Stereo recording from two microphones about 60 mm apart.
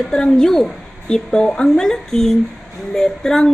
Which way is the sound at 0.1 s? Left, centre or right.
Centre.